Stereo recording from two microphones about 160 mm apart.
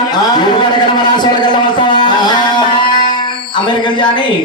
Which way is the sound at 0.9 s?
25° left (ahead or behind).